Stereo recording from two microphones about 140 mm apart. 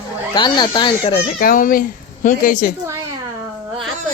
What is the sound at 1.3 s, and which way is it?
Speech, 80° left.